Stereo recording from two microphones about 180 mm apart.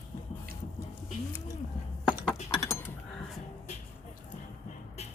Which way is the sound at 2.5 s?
20° left (ahead or behind).